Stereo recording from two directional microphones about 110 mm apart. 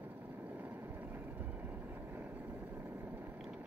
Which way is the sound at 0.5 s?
15° right (ahead or behind).